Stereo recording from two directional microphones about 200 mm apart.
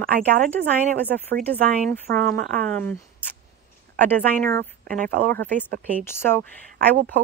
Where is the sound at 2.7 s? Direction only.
10° left (ahead or behind).